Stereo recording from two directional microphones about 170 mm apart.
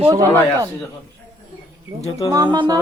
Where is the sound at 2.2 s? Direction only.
20° right (ahead or behind).